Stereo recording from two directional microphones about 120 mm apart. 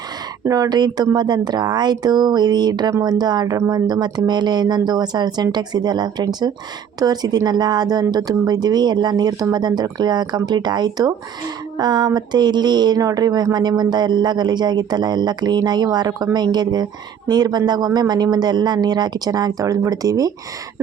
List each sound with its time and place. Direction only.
0.4 s speech: 30° right (ahead or behind)